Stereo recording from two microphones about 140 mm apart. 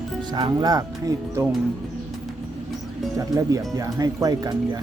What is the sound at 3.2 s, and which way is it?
Speech, 25° right (ahead or behind).